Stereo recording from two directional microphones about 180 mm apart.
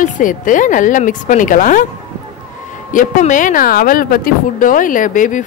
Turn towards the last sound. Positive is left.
turn(degrees=45)  # may be behind; listen again after turning